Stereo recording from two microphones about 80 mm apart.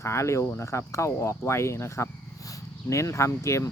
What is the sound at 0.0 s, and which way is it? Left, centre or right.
Speech, left.